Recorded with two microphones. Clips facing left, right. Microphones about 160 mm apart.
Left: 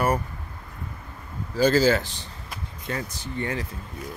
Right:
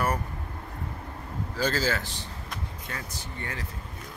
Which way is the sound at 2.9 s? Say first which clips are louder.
Left 11 dB; 25° left (ahead or behind).